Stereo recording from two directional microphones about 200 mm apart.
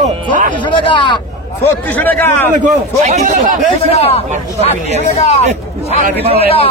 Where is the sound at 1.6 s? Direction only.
10° left (ahead or behind).